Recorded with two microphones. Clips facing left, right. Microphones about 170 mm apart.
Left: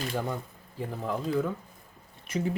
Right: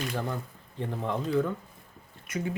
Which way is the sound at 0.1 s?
10° left (ahead or behind).